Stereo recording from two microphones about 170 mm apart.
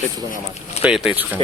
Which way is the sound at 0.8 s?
5° right (ahead or behind).